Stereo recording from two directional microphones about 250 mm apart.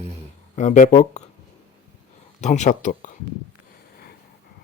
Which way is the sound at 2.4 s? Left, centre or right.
Left.